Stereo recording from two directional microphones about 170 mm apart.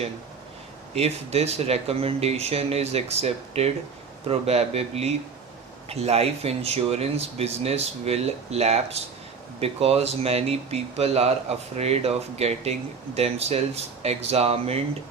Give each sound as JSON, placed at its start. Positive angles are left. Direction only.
{"t": 0.9, "sound": "speech", "side_deg": -40}